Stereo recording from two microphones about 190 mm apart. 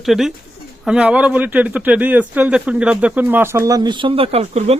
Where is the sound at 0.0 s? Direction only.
Centre (ahead or behind); by 4.8 s 35° right (ahead or behind).